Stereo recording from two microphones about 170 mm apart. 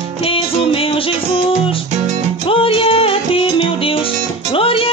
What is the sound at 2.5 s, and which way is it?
Music, 30° left (ahead or behind).